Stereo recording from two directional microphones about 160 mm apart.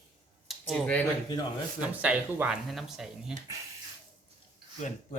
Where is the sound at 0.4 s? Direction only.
Centre (ahead or behind).